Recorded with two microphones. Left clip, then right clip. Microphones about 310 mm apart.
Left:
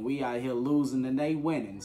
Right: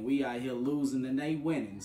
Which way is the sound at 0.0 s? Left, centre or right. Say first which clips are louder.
Left 1 dB; centre.